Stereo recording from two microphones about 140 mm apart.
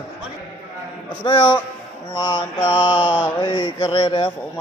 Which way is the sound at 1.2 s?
35° left (ahead or behind).